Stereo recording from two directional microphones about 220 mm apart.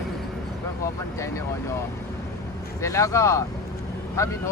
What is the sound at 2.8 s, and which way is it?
Speech, 15° left (ahead or behind).